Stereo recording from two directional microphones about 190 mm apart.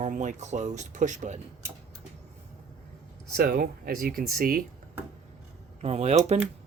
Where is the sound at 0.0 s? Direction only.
40° right (ahead or behind).